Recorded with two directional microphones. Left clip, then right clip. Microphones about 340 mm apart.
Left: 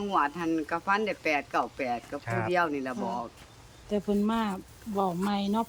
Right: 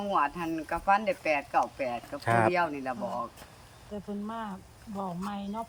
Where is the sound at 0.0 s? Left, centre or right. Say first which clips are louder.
Left 1 dB; centre.